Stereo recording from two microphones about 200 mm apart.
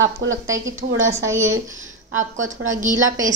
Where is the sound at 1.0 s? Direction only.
15° right (ahead or behind).